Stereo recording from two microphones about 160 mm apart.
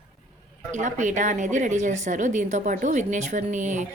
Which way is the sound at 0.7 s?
50° right (ahead or behind).